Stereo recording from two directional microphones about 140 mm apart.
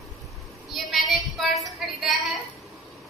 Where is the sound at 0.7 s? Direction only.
Centre (ahead or behind).